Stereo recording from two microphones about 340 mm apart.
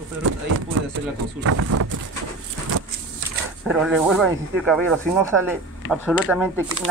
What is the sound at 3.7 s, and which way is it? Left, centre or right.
Speech, centre.